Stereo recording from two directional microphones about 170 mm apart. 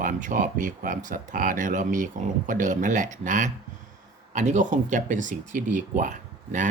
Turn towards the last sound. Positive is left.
turn(degrees=-50)  # may be behind; listen again after turning